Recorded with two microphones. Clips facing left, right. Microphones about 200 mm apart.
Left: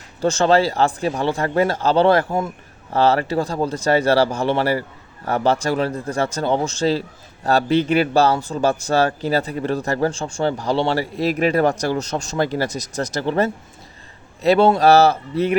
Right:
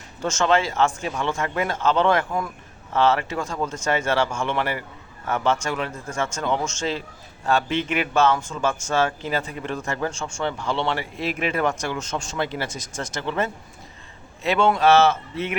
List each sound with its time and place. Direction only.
0.2 s a man's voice: 35° left (ahead or behind)